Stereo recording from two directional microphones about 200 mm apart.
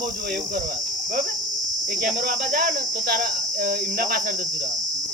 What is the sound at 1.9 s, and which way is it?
Cricket, 40° right (ahead or behind).